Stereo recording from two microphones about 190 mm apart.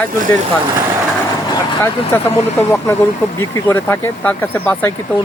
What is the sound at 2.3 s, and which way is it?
Speech, 35° left (ahead or behind).